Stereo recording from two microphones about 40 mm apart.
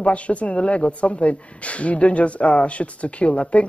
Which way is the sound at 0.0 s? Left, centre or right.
Left.